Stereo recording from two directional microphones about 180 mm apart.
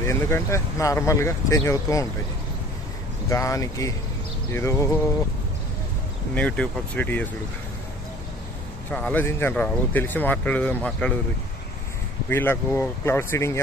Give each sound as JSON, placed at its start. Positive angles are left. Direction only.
{"t": 0.0, "sound": "speech", "side_deg": 15}
{"t": 3.3, "sound": "speech", "side_deg": 15}
{"t": 6.3, "sound": "speech", "side_deg": 5}
{"t": 8.9, "sound": "speech", "side_deg": 10}
{"t": 12.3, "sound": "speech", "side_deg": 10}